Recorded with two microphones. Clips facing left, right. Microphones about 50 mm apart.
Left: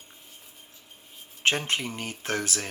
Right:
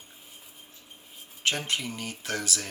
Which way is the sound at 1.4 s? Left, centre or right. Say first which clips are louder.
Left 3 dB; left.